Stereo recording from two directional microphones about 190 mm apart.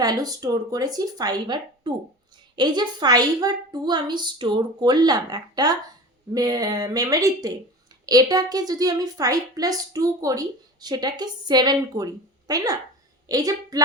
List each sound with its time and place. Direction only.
0.0 s a woman's voice: 20° right (ahead or behind)